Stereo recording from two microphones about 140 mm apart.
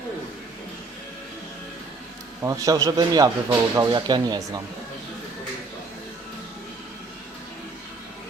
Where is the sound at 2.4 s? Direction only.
20° right (ahead or behind).